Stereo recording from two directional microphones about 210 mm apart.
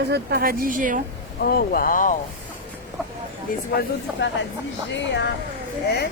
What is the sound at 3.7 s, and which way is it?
Speech, 55° left (ahead or behind).